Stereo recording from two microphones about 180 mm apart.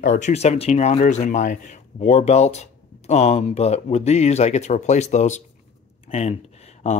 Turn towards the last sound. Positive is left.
turn(degrees=35)  # may be behind; listen again after turning